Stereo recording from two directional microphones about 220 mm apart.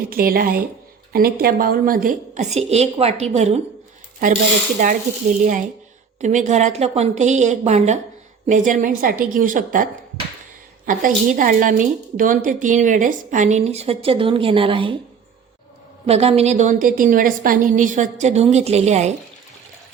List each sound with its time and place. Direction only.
0.1 s a woman's voice: 40° right (ahead or behind)
4.8 s a woman's voice: 35° right (ahead or behind)
16.0 s a woman's voice: 30° right (ahead or behind)